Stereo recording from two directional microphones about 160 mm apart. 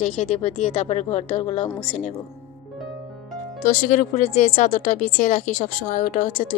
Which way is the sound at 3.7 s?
55° left (ahead or behind).